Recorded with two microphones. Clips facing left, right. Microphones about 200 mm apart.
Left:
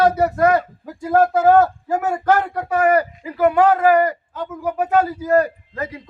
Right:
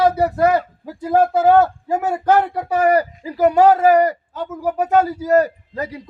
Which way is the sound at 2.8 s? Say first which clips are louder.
Right 1 dB; 35° right (ahead or behind).